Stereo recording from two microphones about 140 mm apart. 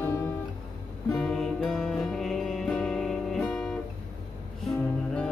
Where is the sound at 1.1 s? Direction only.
5° left (ahead or behind).